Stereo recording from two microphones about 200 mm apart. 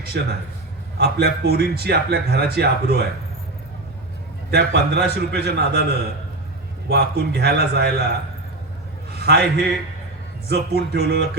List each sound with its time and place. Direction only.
0.1 s a man's voice: 55° right (ahead or behind)
4.5 s a man's voice: 55° right (ahead or behind)
9.1 s a man's voice: 55° right (ahead or behind)